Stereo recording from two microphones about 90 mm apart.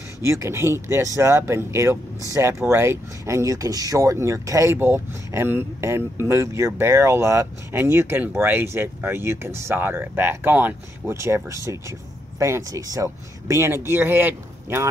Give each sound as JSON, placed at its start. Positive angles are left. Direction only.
{"t": 0.2, "sound": "speech", "side_deg": -30}
{"t": 11.1, "sound": "speech", "side_deg": -30}